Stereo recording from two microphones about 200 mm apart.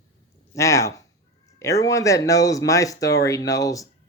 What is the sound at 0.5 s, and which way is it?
Speech, 15° left (ahead or behind).